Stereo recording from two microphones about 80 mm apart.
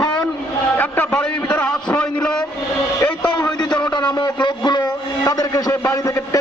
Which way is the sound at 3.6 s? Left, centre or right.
Left.